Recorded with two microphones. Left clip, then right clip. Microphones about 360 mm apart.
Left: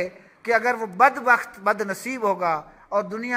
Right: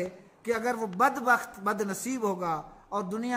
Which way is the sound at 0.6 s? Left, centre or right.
Centre.